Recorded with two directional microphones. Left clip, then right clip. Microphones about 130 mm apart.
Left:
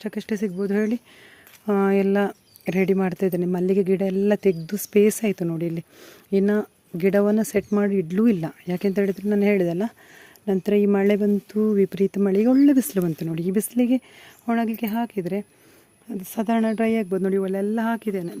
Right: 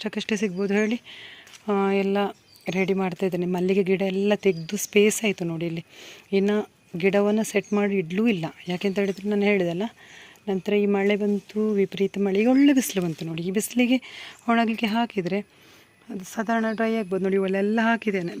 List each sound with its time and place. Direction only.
0.0 s speech: 30° left (ahead or behind)
1.6 s speech: 65° left (ahead or behind)
7.7 s speech: 45° left (ahead or behind)
8.2 s speech: 60° left (ahead or behind)
10.4 s speech: 70° left (ahead or behind); by 11.7 s 85° left
11.7 s speech: 65° left (ahead or behind)
12.6 s speech: 45° left (ahead or behind)
13.1 s speech: 80° left
13.7 s speech: 40° left (ahead or behind)
14.4 s a woman's voice: 25° left (ahead or behind)
16.2 s speech: 85° left; by 17.3 s 50° left (ahead or behind)
17.3 s speech: 15° left (ahead or behind)